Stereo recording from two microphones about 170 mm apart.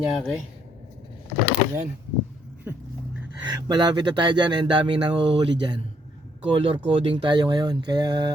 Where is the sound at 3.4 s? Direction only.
25° right (ahead or behind).